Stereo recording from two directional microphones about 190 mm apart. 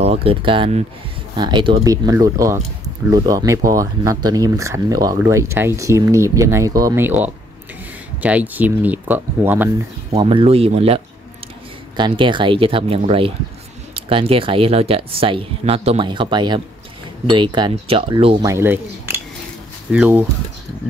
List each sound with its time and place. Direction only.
0.0 s speech: 30° right (ahead or behind); by 9.7 s 10° right (ahead or behind)
10.1 s speech: 30° right (ahead or behind)
12.0 s speech: 25° right (ahead or behind); by 20.2 s 10° right (ahead or behind)